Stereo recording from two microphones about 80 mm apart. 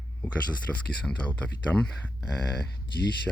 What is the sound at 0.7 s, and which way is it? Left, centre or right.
Speech, centre.